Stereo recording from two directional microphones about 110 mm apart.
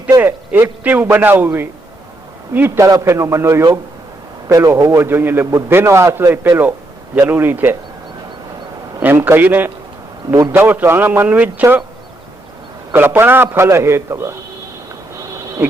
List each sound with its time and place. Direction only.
0.2 s a man's voice: 20° right (ahead or behind)
9.0 s a man's voice: 15° right (ahead or behind)
12.9 s a man's voice: 20° right (ahead or behind)